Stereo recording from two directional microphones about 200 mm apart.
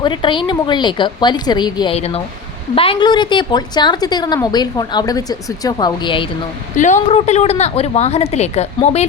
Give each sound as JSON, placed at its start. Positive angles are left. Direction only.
{"t": 0.0, "sound": "a woman's voice", "side_deg": 25}
{"t": 6.7, "sound": "a woman's voice", "side_deg": 35}